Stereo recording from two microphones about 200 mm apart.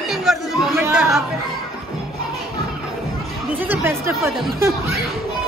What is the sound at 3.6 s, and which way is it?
Chatter, 10° right (ahead or behind).